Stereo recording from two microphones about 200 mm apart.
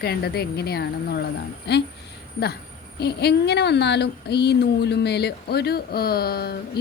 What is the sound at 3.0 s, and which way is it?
Speech, 55° left (ahead or behind).